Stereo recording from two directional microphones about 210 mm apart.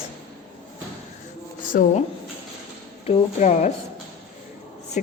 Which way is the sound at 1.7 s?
40° left (ahead or behind).